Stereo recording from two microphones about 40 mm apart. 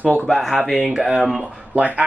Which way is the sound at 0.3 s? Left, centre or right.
Centre.